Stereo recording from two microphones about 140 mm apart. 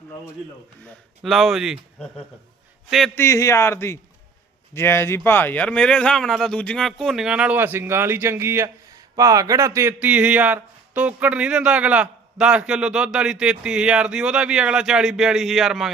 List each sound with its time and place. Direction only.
1.2 s speech: centre (ahead or behind)
3.2 s speech: 20° left (ahead or behind); by 9.9 s 20° right (ahead or behind)
10.0 s speech: 10° right (ahead or behind)